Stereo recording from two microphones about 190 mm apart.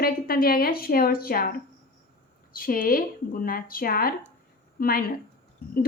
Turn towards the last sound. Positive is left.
turn(degrees=55)  # may be behind; listen again after turning